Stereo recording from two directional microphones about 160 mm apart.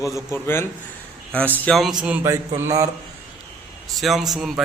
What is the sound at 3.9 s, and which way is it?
Speech, centre (ahead or behind).